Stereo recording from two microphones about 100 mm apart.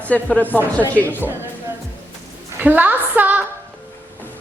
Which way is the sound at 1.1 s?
20° right (ahead or behind).